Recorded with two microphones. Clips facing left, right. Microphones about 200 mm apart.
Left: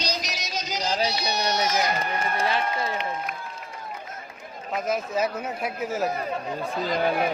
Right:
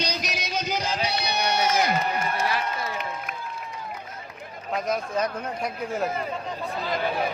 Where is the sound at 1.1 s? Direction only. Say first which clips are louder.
Even; 55° right (ahead or behind).